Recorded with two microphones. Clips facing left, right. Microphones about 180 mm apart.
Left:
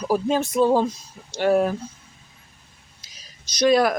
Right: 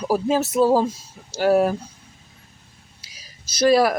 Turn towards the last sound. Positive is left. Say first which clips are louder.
# right 1 dB
turn(degrees=-5)  # may be behind; listen again after turning